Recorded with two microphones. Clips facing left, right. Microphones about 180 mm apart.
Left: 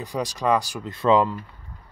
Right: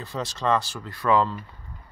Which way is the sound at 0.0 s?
15° left (ahead or behind).